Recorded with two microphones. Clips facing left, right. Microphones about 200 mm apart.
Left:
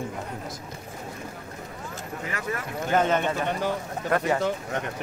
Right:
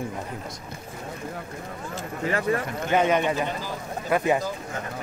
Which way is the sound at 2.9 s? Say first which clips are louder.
Right 1 dB; 10° right (ahead or behind).